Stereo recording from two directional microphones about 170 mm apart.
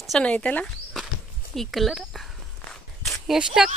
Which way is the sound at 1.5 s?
Centre (ahead or behind).